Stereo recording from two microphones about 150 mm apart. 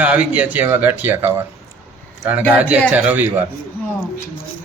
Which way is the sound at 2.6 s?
10° right (ahead or behind).